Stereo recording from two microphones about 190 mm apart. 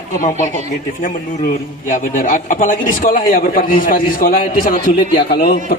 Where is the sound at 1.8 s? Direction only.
40° left (ahead or behind).